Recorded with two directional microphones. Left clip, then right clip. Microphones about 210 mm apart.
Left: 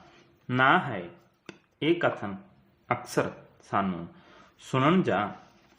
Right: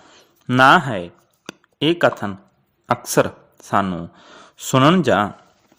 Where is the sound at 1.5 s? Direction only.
45° right (ahead or behind).